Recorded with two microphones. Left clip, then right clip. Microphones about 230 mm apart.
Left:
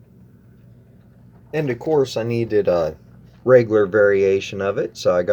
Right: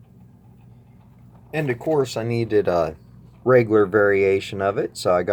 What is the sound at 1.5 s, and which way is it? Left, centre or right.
Speech, centre.